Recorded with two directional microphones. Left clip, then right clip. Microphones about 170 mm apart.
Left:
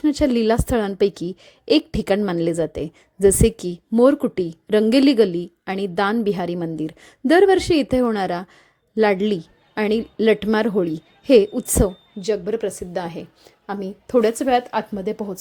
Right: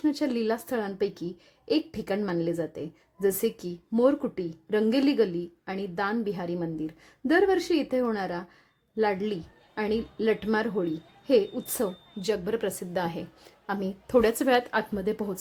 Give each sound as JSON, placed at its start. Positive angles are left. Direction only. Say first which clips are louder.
{"t": 0.0, "sound": "a woman's voice", "louder": "left 9 dB", "side_deg": 35}
{"t": 12.2, "sound": "a woman's voice", "louder": "left 6 dB", "side_deg": 20}